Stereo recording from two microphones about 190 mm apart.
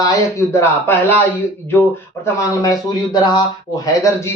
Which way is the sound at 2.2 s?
15° left (ahead or behind).